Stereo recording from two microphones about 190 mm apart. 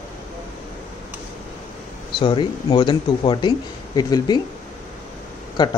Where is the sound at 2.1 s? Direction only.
25° left (ahead or behind).